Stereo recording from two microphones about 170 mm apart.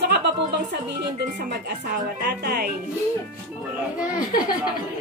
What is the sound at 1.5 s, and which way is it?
A woman's voice, 75° right (ahead or behind).